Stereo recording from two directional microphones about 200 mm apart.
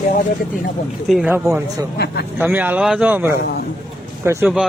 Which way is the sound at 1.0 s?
Centre (ahead or behind).